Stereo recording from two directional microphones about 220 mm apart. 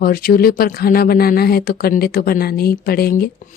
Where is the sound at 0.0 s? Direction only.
45° left (ahead or behind).